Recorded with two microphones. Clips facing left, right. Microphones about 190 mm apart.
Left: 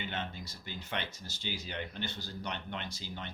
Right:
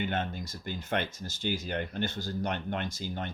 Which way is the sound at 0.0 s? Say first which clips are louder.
Right 7 dB; 50° right (ahead or behind).